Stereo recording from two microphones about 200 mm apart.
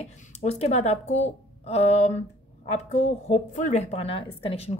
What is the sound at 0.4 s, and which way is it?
Speech, 35° left (ahead or behind).